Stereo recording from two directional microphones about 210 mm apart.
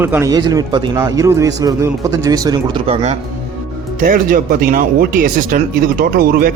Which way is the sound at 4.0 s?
40° right (ahead or behind).